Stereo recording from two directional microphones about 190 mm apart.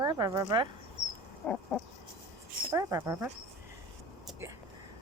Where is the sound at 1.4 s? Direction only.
5° left (ahead or behind).